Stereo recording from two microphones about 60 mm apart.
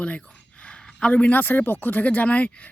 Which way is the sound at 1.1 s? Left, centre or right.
Left.